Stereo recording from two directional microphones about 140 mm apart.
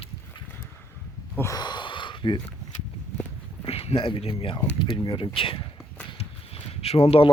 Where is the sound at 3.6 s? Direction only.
45° left (ahead or behind).